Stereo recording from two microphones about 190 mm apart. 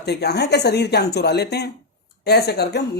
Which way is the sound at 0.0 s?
60° left (ahead or behind).